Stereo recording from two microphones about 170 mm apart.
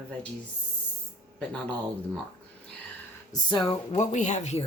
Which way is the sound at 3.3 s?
25° left (ahead or behind).